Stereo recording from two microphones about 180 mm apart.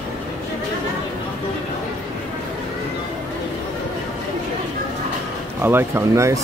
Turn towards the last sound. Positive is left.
turn(degrees=-15)  # may be behind; listen again after turning